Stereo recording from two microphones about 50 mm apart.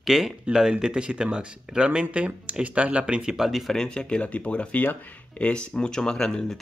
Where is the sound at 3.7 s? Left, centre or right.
Centre.